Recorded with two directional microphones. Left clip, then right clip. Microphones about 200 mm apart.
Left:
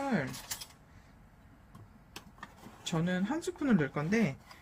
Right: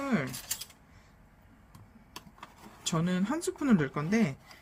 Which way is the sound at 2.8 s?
20° right (ahead or behind).